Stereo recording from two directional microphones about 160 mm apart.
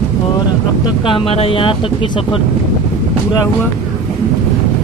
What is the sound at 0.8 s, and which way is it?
Speech, 35° left (ahead or behind).